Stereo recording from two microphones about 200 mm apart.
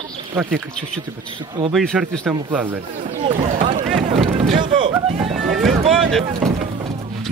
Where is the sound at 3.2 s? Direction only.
40° right (ahead or behind).